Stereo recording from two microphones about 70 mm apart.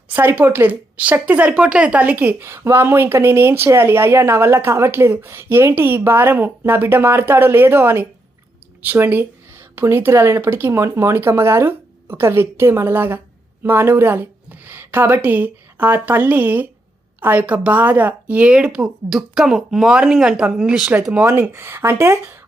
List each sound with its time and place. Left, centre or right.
0.1 s speech: right
2.5 s speech: right; by 20.9 s centre
21.1 s speech: right